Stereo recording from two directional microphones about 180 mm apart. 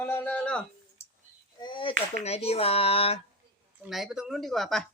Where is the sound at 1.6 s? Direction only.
30° left (ahead or behind).